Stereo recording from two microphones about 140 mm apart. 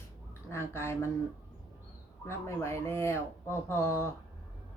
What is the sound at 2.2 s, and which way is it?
Speech, 20° left (ahead or behind).